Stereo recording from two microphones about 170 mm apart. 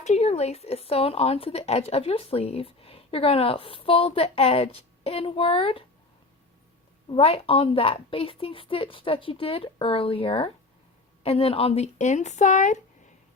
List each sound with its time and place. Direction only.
0.0 s speech: 40° left (ahead or behind)
7.1 s a woman's voice: 35° left (ahead or behind)